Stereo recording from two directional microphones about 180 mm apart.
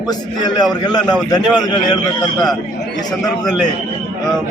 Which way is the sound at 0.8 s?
20° left (ahead or behind).